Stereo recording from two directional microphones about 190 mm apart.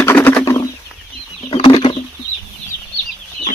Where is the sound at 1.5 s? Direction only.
25° left (ahead or behind).